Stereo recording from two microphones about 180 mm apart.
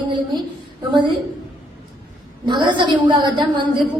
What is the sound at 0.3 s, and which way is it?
Speech, 25° right (ahead or behind).